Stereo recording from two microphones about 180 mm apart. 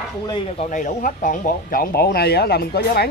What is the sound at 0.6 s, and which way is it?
Speech, 45° left (ahead or behind).